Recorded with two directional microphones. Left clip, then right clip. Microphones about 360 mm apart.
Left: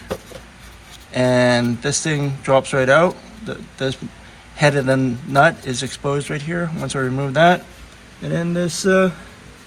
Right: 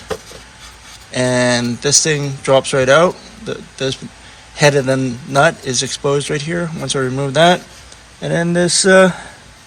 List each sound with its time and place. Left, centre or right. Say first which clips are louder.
1.1 s a man's voice: right 1 dB; centre
8.5 s speech: right 7 dB; right